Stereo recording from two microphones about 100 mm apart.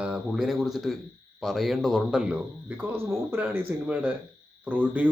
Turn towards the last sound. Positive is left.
turn(degrees=-15)  # may be behind; listen again after turning